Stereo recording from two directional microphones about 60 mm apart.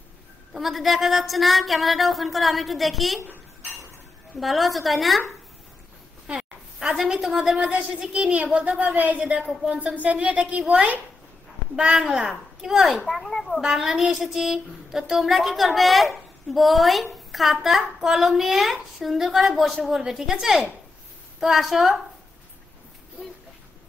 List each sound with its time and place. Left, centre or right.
0.6 s speech: centre
4.4 s speech: centre
6.2 s a sound: centre
7.0 s a woman's voice: centre
12.2 s a woman's voice: centre
13.1 s speech: centre
13.6 s speech: centre